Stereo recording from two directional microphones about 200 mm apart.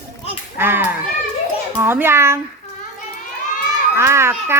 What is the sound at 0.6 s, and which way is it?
Speech, 10° right (ahead or behind).